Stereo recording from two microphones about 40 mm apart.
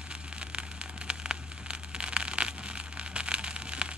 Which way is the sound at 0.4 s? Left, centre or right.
Right.